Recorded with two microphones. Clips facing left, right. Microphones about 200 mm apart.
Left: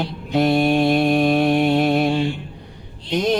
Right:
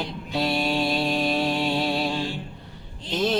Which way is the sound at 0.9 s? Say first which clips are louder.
Left 8 dB; 50° left (ahead or behind).